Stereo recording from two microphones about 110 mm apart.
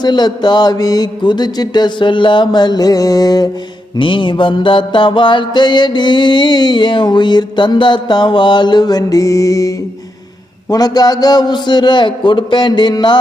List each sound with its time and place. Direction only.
0.0 s mantra: 40° left (ahead or behind)
3.9 s mantra: 50° left (ahead or behind)